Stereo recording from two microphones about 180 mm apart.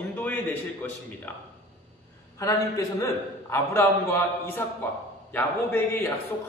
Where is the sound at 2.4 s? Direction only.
20° left (ahead or behind).